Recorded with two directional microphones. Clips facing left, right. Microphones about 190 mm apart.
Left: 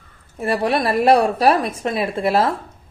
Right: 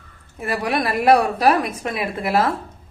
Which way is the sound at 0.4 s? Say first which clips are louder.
Left 3 dB; 30° left (ahead or behind).